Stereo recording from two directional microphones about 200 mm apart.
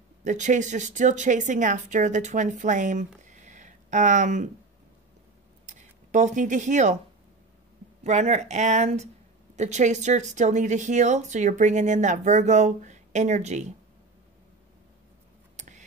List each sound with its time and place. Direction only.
0.2 s a woman's voice: 35° right (ahead or behind)
5.7 s speech: 35° right (ahead or behind)
8.0 s a woman's voice: 35° right (ahead or behind)
15.5 s a sound: 35° right (ahead or behind)